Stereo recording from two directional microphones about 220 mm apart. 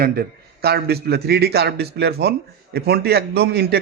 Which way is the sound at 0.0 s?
45° right (ahead or behind).